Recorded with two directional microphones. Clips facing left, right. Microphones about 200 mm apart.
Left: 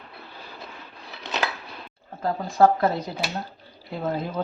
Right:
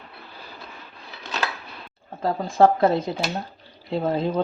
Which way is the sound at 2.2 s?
25° right (ahead or behind).